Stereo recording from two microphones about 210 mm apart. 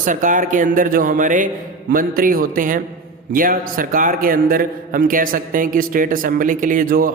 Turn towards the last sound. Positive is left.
turn(degrees=-40)  # may be behind; listen again after turning